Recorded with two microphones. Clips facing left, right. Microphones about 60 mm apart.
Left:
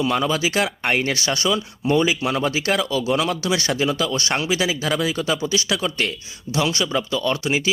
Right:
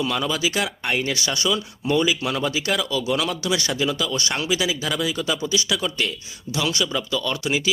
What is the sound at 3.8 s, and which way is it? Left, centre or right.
Speech, left.